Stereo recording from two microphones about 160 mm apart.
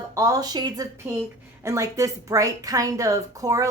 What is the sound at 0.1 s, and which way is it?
A woman's voice, 20° right (ahead or behind).